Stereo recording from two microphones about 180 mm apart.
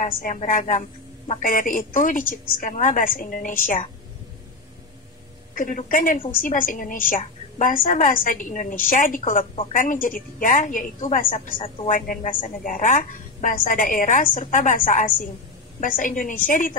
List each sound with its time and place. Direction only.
0.0 s a woman's voice: 45° left (ahead or behind)
5.6 s a woman's voice: 45° left (ahead or behind)
11.3 s a woman's voice: 30° left (ahead or behind)
11.9 s a woman's voice: 45° left (ahead or behind)